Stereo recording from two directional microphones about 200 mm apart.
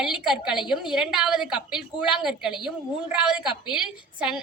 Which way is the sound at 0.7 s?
5° right (ahead or behind).